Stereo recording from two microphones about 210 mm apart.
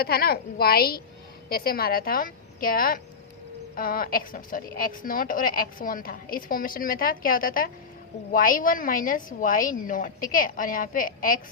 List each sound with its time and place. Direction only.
0.0 s a woman's voice: 45° left (ahead or behind)